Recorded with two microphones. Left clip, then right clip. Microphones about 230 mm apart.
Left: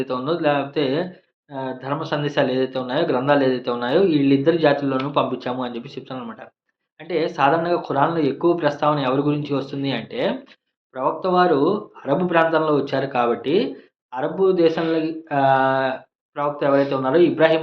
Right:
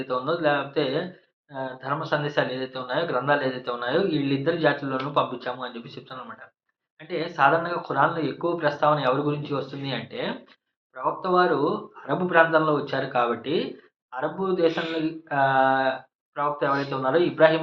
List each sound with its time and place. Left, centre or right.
0.0 s speech: left